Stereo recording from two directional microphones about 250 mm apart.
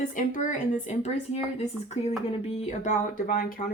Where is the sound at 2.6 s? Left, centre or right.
Left.